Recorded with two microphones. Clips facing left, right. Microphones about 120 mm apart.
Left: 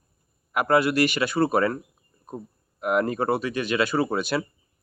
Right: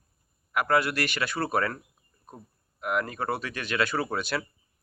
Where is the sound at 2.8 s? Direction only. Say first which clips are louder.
Left 6 dB; 25° left (ahead or behind).